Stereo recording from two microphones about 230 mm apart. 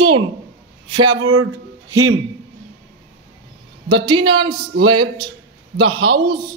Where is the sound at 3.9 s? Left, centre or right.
Right.